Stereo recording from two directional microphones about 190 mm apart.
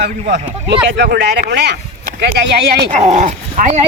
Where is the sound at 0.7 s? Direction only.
65° right (ahead or behind).